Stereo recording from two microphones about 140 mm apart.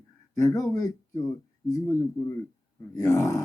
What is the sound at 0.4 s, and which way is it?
Speech, 25° left (ahead or behind).